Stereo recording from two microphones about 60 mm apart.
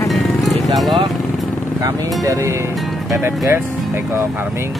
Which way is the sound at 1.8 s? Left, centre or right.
Right.